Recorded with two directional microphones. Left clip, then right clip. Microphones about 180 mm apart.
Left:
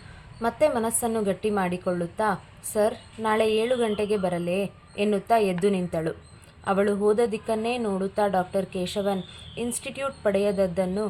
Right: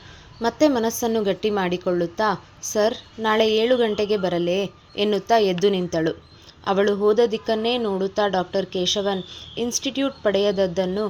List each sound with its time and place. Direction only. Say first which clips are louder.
0.4 s a woman's voice: right 3 dB; 35° right (ahead or behind)